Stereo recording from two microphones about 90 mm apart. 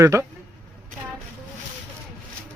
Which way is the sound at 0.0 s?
35° right (ahead or behind).